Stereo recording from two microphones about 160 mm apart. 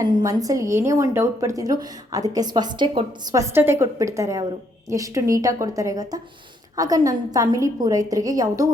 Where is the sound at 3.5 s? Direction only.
15° right (ahead or behind).